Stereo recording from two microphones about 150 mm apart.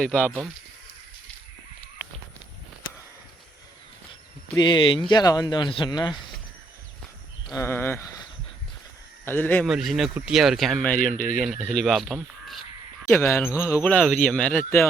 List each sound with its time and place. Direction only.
0.0 s speech: 5° left (ahead or behind)
4.5 s speech: 30° left (ahead or behind)
7.5 s speech: 15° left (ahead or behind)
9.6 s speech: centre (ahead or behind)
13.1 s speech: 15° left (ahead or behind)
13.8 s speech: 5° left (ahead or behind)